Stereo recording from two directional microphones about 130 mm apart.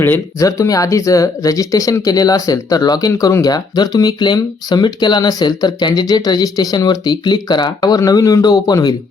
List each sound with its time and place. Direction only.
0.0 s speech: 20° left (ahead or behind)